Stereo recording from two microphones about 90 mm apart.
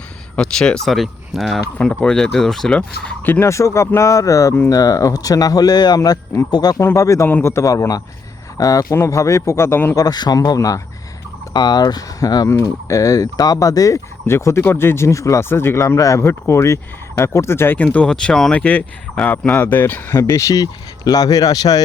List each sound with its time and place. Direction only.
0.3 s speech: 10° left (ahead or behind)
3.4 s speech: 35° left (ahead or behind)
6.7 s speech: 35° left (ahead or behind)
9.9 s speech: 45° left (ahead or behind)
12.5 s speech: 35° left (ahead or behind)
17.8 s speech: 10° left (ahead or behind); by 21.8 s 45° left (ahead or behind)